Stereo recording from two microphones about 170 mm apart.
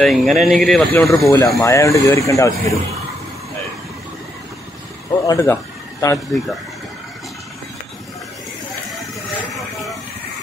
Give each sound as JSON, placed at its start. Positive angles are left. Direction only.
{"t": 0.0, "sound": "speech", "side_deg": 0}
{"t": 1.2, "sound": "speech", "side_deg": 20}
{"t": 5.2, "sound": "a man's voice", "side_deg": 20}
{"t": 6.1, "sound": "speech", "side_deg": 0}